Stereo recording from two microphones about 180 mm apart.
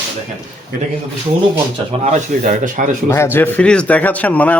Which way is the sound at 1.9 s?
40° right (ahead or behind).